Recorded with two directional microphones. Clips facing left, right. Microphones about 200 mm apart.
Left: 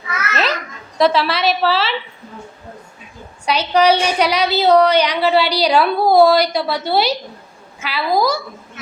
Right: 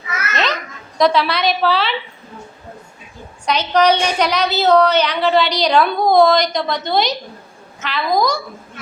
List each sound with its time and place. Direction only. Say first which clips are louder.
0.9 s a woman's voice: even; 5° left (ahead or behind)
3.4 s a woman's voice: even; 10° left (ahead or behind)